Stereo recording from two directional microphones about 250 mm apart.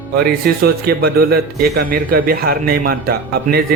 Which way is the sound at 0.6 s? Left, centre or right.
Right.